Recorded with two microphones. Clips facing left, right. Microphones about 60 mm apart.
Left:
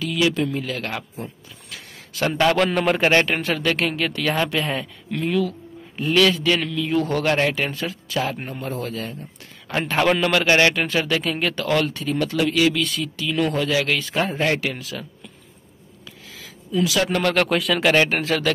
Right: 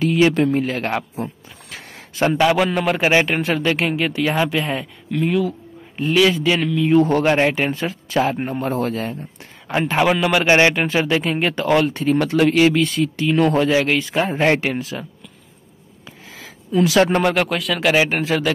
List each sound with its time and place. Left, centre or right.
0.0 s a sound: right
0.3 s a man's voice: right
2.3 s a man's voice: centre; by 8.5 s right
8.5 s speech: right
9.7 s speech: centre
10.4 s a man's voice: right
12.4 s a man's voice: right
13.8 s a man's voice: centre
16.3 s a sound: right
17.2 s speech: centre